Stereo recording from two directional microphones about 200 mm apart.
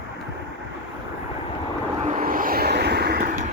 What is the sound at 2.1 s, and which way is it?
Vehicle, 45° right (ahead or behind).